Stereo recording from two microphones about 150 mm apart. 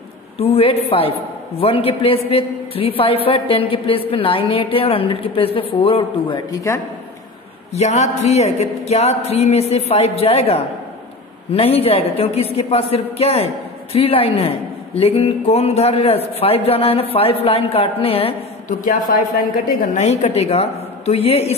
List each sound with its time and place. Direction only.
0.4 s a man's voice: 40° left (ahead or behind)
7.7 s a man's voice: 50° left (ahead or behind)
18.7 s a woman's voice: 65° left (ahead or behind)
20.0 s speech: 50° left (ahead or behind)